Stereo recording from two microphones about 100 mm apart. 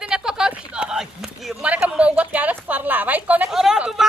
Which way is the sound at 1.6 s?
15° right (ahead or behind).